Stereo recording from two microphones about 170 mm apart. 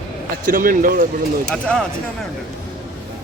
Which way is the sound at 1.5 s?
5° left (ahead or behind).